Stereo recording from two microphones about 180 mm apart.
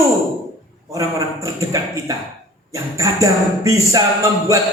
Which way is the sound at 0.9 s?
15° right (ahead or behind).